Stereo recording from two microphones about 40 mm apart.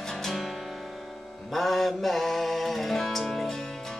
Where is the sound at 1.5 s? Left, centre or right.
Centre.